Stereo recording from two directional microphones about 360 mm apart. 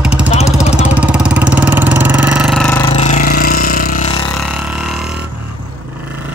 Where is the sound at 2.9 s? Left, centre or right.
Centre.